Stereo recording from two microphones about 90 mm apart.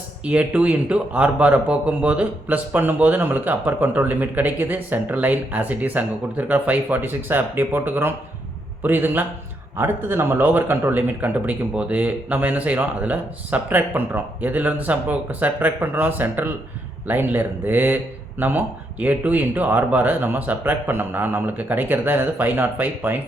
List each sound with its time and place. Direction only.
0.3 s speech: 15° right (ahead or behind)